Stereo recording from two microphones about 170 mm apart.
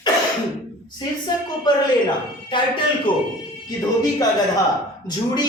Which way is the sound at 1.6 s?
30° left (ahead or behind).